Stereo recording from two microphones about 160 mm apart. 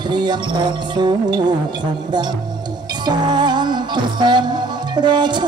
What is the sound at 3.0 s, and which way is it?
Music, 25° right (ahead or behind).